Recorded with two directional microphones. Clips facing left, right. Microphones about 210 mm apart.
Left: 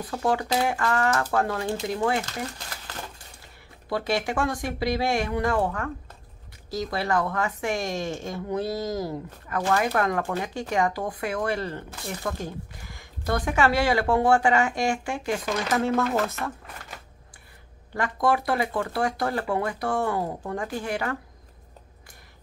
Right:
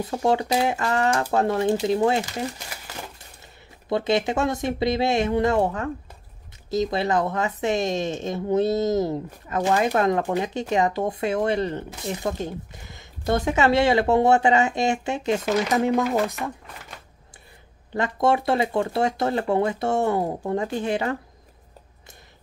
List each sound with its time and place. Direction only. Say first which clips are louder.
0.0 s speech: right 4 dB; 25° right (ahead or behind)
3.9 s speech: right 4 dB; 20° right (ahead or behind)
17.9 s speech: right 3 dB; 25° right (ahead or behind)